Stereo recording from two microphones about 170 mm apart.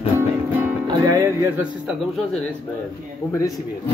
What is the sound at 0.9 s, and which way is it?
Music, 20° right (ahead or behind).